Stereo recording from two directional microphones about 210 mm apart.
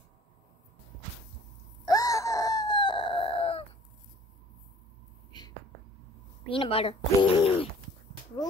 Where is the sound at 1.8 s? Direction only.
15° left (ahead or behind).